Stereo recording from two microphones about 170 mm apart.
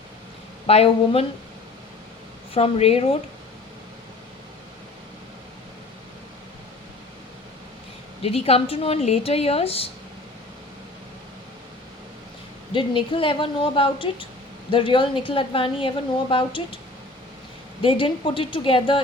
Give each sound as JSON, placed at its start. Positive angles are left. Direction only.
{"t": 0.7, "sound": "a woman's voice", "side_deg": 35}
{"t": 2.5, "sound": "a woman's voice", "side_deg": 35}
{"t": 8.2, "sound": "a woman's voice", "side_deg": 35}
{"t": 12.7, "sound": "a woman's voice", "side_deg": 30}
{"t": 17.8, "sound": "a woman's voice", "side_deg": 30}